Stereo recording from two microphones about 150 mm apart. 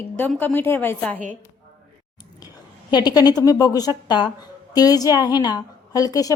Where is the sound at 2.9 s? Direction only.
25° left (ahead or behind).